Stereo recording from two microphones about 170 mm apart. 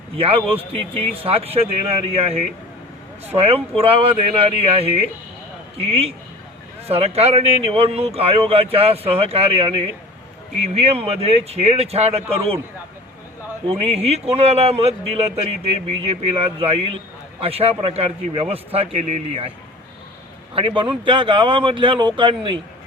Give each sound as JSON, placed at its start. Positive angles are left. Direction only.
{"t": 0.2, "sound": "a man's voice", "side_deg": -35}
{"t": 13.7, "sound": "a man's voice", "side_deg": -35}
{"t": 20.6, "sound": "speech", "side_deg": -30}